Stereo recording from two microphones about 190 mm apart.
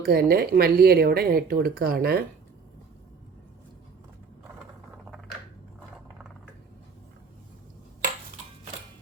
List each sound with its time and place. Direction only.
0.0 s speech: 55° right (ahead or behind)